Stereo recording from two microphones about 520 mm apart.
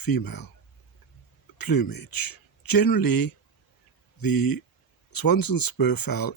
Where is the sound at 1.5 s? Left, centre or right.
Left.